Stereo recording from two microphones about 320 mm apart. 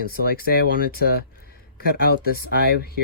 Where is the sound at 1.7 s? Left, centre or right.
Left.